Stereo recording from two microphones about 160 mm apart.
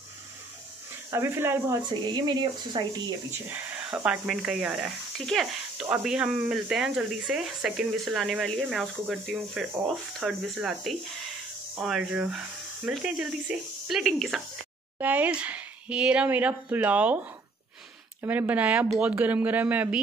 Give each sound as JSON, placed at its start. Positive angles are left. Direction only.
{"t": 1.1, "sound": "speech", "side_deg": -15}
{"t": 1.9, "sound": "speech", "side_deg": -25}
{"t": 3.4, "sound": "speech", "side_deg": -5}